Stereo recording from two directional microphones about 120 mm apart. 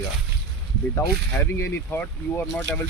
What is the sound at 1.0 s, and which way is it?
Speech, 20° left (ahead or behind).